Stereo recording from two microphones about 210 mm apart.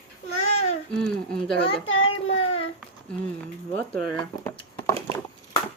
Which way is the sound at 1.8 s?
70° left (ahead or behind).